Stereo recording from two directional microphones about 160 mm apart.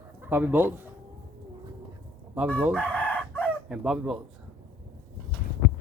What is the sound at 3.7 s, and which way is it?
Speech, 5° right (ahead or behind).